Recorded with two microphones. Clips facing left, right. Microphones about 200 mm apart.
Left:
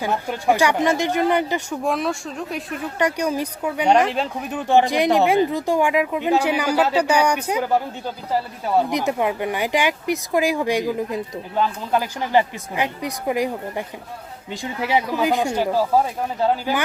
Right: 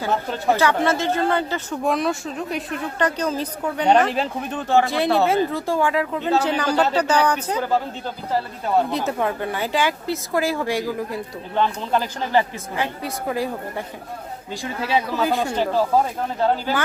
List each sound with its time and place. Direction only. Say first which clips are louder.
0.0 s speech: even; 15° left (ahead or behind)
1.8 s speech: right 4 dB; centre (ahead or behind)
3.0 s speech: left 2 dB; 10° left (ahead or behind)
4.7 s speech: left 2 dB; 15° left (ahead or behind)
11.5 s speech: even; 5° left (ahead or behind)